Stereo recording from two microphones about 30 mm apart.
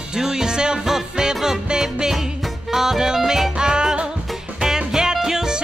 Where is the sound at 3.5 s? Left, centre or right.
Right.